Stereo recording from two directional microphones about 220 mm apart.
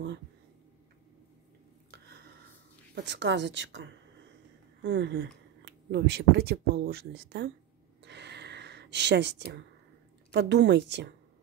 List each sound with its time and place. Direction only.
1.9 s writing: 50° right (ahead or behind)
2.9 s speech: 50° right (ahead or behind)
8.0 s a sound: 50° right (ahead or behind)
10.3 s speech: 50° right (ahead or behind)